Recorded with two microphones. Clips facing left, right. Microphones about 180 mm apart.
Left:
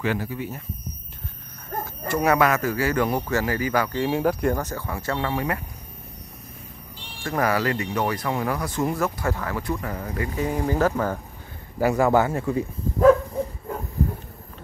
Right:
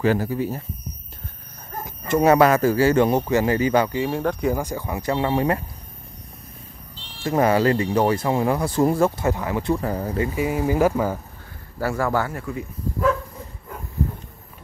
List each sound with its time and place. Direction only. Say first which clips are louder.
0.0 s a man's voice: right 6 dB; 40° right (ahead or behind)
2.0 s speech: right 5 dB; 25° right (ahead or behind)
4.1 s speech: left 1 dB; 5° left (ahead or behind)
4.6 s speech: right 3 dB; 15° right (ahead or behind)
7.2 s speech: right 5 dB; 25° right (ahead or behind)
10.3 s speech: even; 10° right (ahead or behind)
11.8 s speech: left 4 dB; 20° left (ahead or behind)